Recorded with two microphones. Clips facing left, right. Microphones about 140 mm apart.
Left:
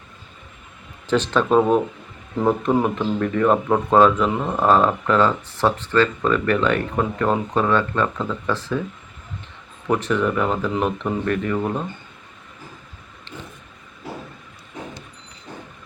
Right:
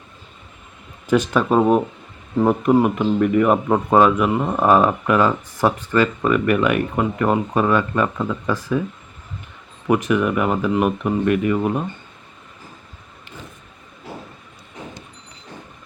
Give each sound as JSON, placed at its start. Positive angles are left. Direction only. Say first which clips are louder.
{"t": 1.0, "sound": "speech", "louder": "right 2 dB", "side_deg": -10}
{"t": 9.8, "sound": "speech", "louder": "right 2 dB", "side_deg": -10}